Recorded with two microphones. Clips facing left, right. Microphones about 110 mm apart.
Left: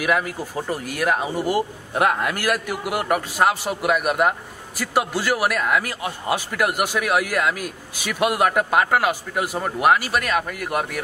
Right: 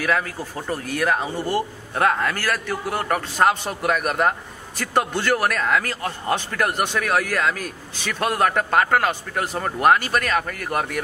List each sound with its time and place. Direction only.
0.0 s a man's voice: 15° left (ahead or behind)